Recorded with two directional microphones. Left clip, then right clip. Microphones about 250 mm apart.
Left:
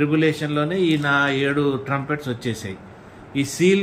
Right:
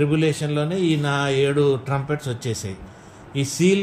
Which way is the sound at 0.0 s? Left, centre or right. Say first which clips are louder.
Left 1 dB; right.